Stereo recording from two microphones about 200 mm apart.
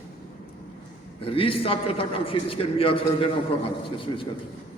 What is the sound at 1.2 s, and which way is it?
A man's voice, 25° left (ahead or behind).